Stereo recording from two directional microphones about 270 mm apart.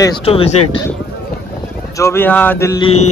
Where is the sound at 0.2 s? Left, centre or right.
Left.